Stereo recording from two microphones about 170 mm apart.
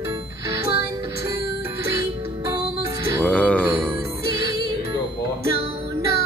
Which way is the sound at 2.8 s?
20° right (ahead or behind).